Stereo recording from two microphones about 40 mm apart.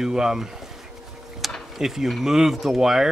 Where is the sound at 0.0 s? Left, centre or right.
Centre.